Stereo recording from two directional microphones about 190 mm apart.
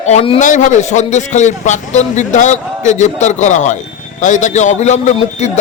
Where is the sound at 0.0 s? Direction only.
35° left (ahead or behind).